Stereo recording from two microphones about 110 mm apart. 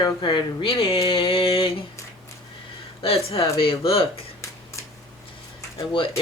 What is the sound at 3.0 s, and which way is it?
Speech, 60° left (ahead or behind).